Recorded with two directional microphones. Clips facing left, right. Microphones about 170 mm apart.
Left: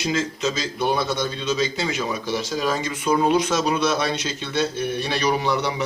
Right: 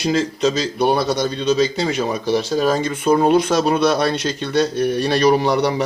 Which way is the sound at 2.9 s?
50° right (ahead or behind).